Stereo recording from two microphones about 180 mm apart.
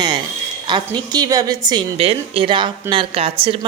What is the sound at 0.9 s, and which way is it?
A man's voice, 20° right (ahead or behind).